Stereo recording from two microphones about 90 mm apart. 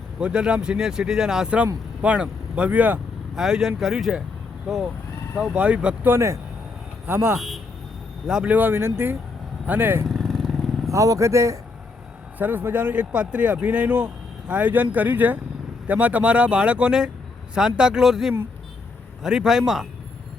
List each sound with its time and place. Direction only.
0.2 s speech: 10° right (ahead or behind)
3.3 s a man's voice: 5° right (ahead or behind)
6.1 s speech: 30° right (ahead or behind)
7.3 s speech: 5° right (ahead or behind)
8.5 s speech: 25° right (ahead or behind)
10.2 s vehicle: centre (ahead or behind)
10.9 s speech: 40° right (ahead or behind)
12.4 s a man's voice: 20° right (ahead or behind); by 19.9 s 5° right (ahead or behind)